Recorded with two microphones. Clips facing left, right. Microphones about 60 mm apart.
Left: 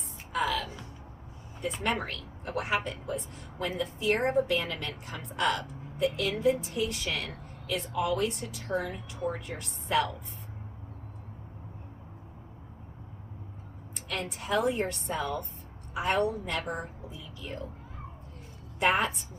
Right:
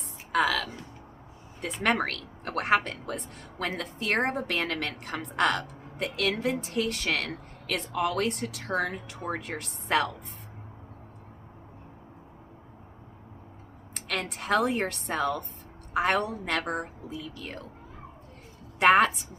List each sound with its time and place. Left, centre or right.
0.3 s music: right
1.6 s speech: right
13.9 s a woman's voice: right
18.8 s a woman's voice: right